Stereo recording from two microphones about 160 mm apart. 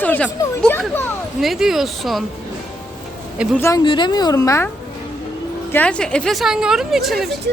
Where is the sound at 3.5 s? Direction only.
15° left (ahead or behind).